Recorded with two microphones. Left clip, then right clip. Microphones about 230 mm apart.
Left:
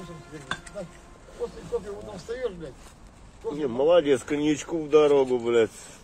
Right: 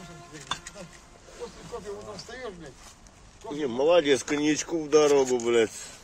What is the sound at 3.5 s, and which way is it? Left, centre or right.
Speech, centre.